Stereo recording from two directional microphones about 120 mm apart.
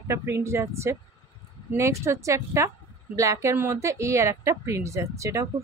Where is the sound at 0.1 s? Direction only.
20° right (ahead or behind).